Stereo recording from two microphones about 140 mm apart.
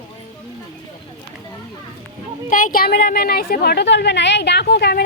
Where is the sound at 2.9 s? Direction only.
80° left.